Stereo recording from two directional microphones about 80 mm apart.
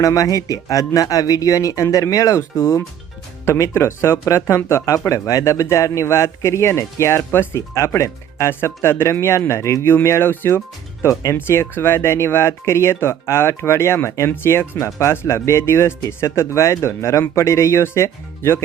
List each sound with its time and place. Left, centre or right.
0.0 s speech: left
11.0 s speech: left
11.3 s speech: left